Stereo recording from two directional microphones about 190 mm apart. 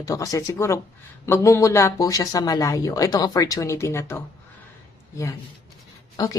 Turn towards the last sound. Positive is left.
turn(degrees=20)  # may be behind; listen again after turning